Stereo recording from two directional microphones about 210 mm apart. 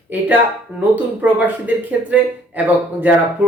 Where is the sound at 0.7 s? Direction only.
10° right (ahead or behind).